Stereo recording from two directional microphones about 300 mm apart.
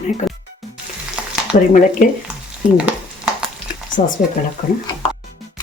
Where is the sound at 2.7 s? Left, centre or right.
Centre.